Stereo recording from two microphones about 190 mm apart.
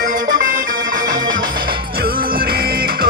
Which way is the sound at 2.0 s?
50° right (ahead or behind).